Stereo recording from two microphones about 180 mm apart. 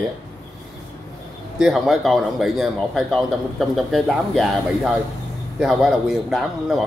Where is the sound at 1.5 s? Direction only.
Centre (ahead or behind).